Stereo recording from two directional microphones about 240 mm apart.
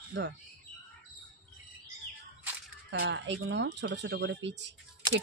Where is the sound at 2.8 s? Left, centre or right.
Right.